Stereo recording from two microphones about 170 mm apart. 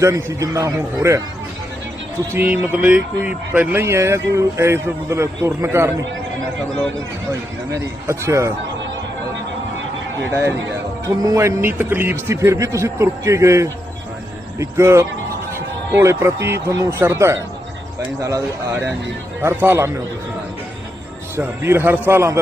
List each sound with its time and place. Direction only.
0.0 s speech: 15° right (ahead or behind)
2.3 s speech: 10° right (ahead or behind)
7.7 s speech: 15° right (ahead or behind)
11.0 s speech: 20° right (ahead or behind)
21.3 s speech: 15° right (ahead or behind)